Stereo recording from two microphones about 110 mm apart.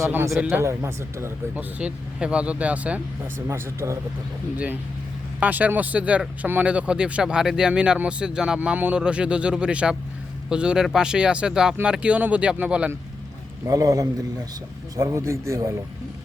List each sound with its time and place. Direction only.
0.3 s speech: centre (ahead or behind)
0.6 s speech: 25° right (ahead or behind)
1.8 s speech: 10° right (ahead or behind)
3.5 s speech: 25° right (ahead or behind)
13.7 s a man's voice: 30° right (ahead or behind)